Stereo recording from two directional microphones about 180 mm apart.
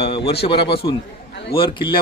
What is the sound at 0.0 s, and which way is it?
A man's voice, 30° left (ahead or behind).